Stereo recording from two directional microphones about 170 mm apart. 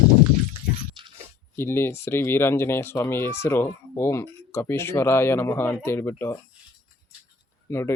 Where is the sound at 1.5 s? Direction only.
15° left (ahead or behind).